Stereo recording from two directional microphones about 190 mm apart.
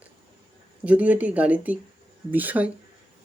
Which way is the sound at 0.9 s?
10° right (ahead or behind).